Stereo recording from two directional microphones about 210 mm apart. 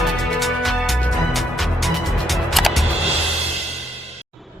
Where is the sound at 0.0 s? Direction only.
Centre (ahead or behind).